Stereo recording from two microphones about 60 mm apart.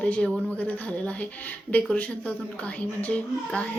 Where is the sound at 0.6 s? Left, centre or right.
Left.